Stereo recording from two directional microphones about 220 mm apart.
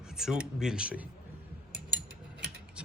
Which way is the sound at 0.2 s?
Centre (ahead or behind).